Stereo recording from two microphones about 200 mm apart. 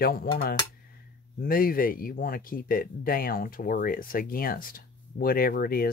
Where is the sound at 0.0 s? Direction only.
50° left (ahead or behind).